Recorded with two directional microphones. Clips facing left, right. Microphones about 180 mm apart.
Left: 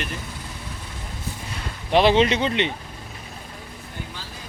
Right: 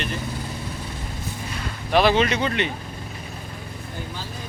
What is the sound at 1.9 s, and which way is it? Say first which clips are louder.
Speech: left 2 dB; 25° left (ahead or behind).